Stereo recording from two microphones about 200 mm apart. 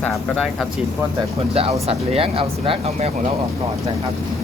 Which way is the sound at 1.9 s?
30° right (ahead or behind).